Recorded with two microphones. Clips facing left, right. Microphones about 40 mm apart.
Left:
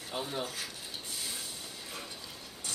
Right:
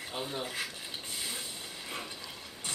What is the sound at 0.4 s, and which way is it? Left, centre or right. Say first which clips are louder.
Speech: right 1 dB; right.